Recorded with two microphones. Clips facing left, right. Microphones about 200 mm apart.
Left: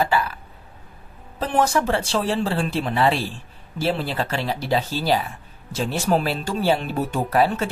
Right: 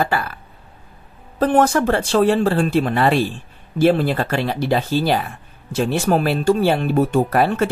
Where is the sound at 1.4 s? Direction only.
55° right (ahead or behind).